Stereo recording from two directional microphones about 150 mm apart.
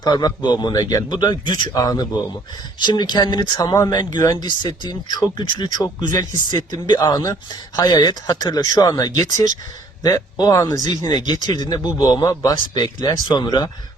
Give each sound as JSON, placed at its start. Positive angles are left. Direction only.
{"t": 0.0, "sound": "speech", "side_deg": 30}